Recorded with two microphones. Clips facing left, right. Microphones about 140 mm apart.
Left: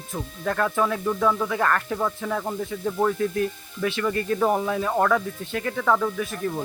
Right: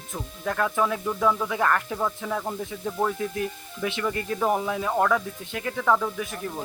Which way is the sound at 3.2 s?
15° right (ahead or behind).